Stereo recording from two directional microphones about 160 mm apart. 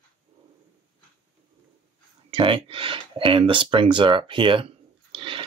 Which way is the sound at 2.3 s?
35° right (ahead or behind).